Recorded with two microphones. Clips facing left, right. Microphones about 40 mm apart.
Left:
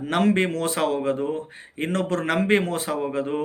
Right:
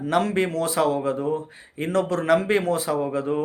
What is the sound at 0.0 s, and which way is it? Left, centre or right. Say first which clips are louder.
Speech: left 1 dB; left.